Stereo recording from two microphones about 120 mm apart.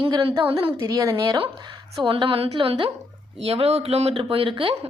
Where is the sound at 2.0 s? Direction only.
45° right (ahead or behind).